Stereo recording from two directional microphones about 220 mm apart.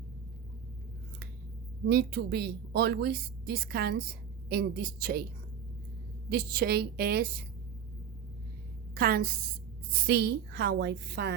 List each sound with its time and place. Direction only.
1.9 s a woman's voice: 45° right (ahead or behind)
6.3 s a woman's voice: 45° right (ahead or behind)
9.0 s a woman's voice: 45° right (ahead or behind)